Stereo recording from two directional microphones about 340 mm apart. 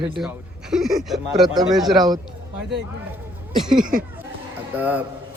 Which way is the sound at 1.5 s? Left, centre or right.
Centre.